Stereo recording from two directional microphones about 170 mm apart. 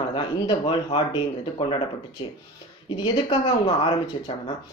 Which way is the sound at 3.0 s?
30° left (ahead or behind).